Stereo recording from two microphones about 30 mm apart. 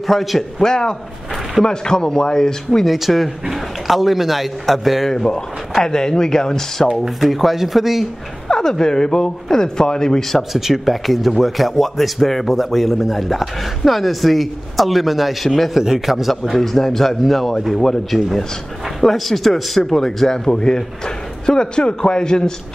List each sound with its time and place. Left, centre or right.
0.0 s a man's voice: centre
0.4 s a man's voice: centre
2.8 s a man's voice: centre
5.1 s a man's voice: left
7.2 s a man's voice: centre
8.5 s a man's voice: left
10.5 s a man's voice: centre
15.4 s a man's voice: centre
16.1 s a man's voice: centre
16.5 s a man's voice: centre
18.9 s a man's voice: centre; by 22.5 s left